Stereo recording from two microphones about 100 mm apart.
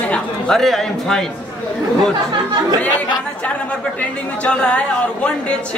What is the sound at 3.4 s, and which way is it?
A man's voice, 10° left (ahead or behind).